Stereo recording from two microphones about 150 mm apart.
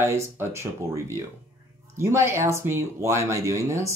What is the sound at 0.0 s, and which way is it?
Speech, 15° right (ahead or behind).